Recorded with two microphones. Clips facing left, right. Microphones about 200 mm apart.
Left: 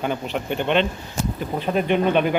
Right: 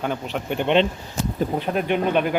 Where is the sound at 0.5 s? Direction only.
20° right (ahead or behind).